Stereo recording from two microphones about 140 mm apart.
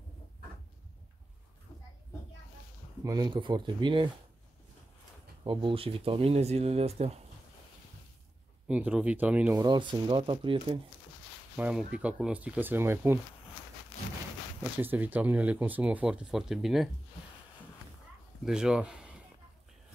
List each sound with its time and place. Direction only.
3.0 s speech: 25° right (ahead or behind)
5.4 s speech: 35° right (ahead or behind)
8.6 s speech: 10° right (ahead or behind)
9.6 s speech: 35° right (ahead or behind)
11.5 s speech: 10° right (ahead or behind)
14.8 s speech: 15° right (ahead or behind)
18.4 s speech: 5° right (ahead or behind)